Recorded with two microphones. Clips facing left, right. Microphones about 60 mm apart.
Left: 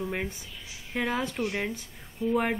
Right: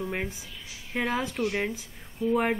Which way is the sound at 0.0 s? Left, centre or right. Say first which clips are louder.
Even; centre.